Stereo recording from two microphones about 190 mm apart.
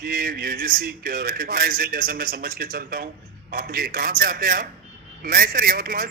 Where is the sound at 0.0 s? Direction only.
50° right (ahead or behind).